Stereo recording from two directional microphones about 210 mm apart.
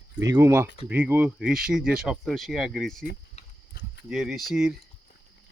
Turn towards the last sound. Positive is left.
turn(degrees=0)  # may be behind; listen again after turning